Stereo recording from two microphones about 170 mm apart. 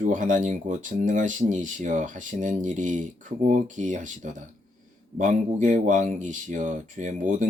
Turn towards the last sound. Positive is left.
turn(degrees=-45)  # may be behind; listen again after turning